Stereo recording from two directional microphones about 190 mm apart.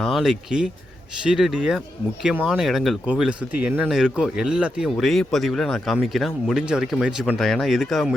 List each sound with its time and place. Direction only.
0.0 s speech: centre (ahead or behind)